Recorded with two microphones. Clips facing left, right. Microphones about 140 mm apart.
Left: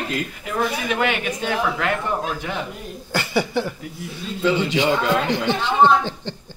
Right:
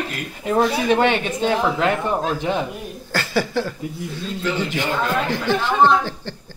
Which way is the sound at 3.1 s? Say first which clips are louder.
Even; 20° left (ahead or behind).